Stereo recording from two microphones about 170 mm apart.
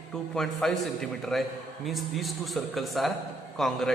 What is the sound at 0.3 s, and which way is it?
A man's voice, centre (ahead or behind).